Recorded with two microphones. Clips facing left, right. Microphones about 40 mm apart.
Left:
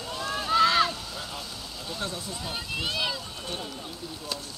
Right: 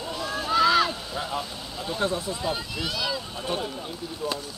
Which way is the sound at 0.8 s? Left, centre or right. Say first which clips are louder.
Right 3 dB; right.